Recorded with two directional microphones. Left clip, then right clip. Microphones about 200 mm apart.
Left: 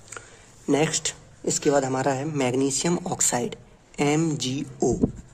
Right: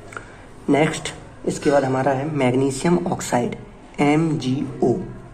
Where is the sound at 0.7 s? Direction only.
35° left (ahead or behind).